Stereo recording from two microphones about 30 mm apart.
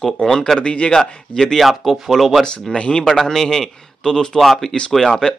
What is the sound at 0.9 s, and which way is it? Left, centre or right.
Speech, left.